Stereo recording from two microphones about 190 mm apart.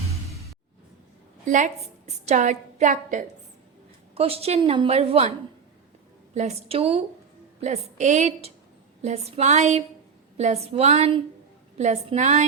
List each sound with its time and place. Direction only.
1.5 s a woman's voice: 40° right (ahead or behind)
4.1 s a woman's voice: 30° right (ahead or behind)
6.3 s a woman's voice: 35° right (ahead or behind)